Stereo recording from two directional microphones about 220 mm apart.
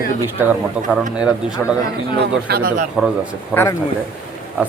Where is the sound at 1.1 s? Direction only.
5° right (ahead or behind).